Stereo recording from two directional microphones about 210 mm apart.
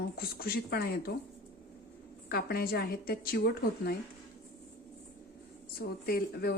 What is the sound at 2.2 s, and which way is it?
Speech, 45° left (ahead or behind).